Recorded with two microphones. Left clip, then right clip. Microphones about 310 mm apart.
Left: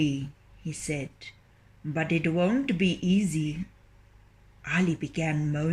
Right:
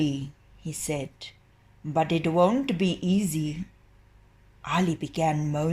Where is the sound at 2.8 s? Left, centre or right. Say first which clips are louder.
Even; right.